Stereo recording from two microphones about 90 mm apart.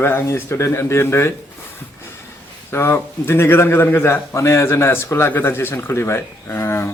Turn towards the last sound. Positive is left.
turn(degrees=25)  # may be behind; listen again after turning